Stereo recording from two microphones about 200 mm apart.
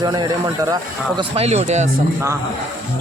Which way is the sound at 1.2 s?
30° right (ahead or behind).